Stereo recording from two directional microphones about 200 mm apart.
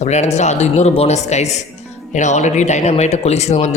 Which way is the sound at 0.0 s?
35° left (ahead or behind).